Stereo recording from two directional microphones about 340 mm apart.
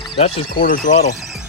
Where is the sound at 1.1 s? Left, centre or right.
Centre.